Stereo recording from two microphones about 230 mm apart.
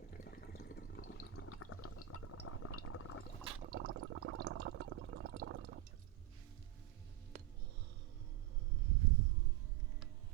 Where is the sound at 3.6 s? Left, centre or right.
Right.